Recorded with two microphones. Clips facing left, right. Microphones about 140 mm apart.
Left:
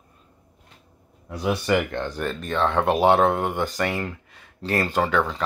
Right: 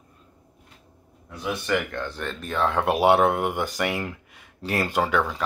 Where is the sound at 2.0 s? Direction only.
10° left (ahead or behind).